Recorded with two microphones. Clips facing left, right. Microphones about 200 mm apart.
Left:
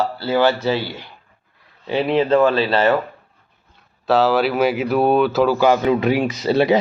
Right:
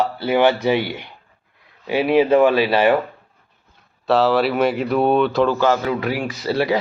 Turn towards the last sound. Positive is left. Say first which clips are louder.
# left 4 dB
turn(degrees=20)  # may be behind; listen again after turning